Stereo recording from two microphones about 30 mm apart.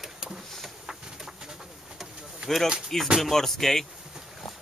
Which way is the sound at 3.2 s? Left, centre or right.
Centre.